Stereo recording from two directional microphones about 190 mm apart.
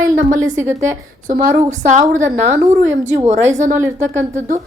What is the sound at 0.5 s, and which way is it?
Speech, 15° right (ahead or behind).